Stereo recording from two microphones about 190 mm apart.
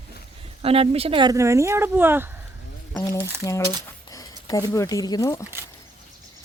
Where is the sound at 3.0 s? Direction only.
15° left (ahead or behind).